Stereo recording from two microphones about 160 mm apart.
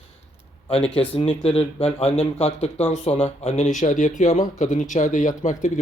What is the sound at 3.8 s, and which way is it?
Speech, 50° left (ahead or behind).